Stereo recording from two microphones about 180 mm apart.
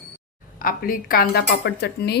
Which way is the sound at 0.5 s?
50° left (ahead or behind).